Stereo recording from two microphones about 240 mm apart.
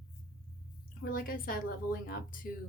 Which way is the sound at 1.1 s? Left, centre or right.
Left.